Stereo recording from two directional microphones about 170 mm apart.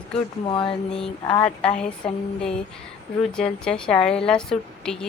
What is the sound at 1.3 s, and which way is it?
Speech, 5° left (ahead or behind).